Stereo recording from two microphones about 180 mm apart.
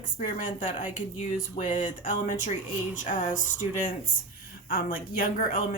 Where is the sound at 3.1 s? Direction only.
45° left (ahead or behind).